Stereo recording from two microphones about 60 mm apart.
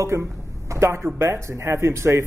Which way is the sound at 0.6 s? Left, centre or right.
Right.